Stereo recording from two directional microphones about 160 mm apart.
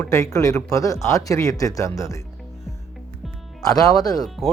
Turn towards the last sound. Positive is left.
turn(degrees=0)  # may be behind; listen again after turning